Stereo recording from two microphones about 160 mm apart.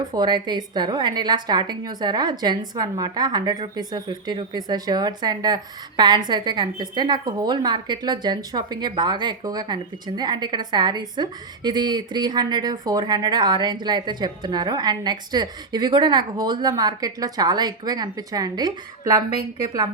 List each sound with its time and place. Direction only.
0.0 s a woman's voice: 25° right (ahead or behind)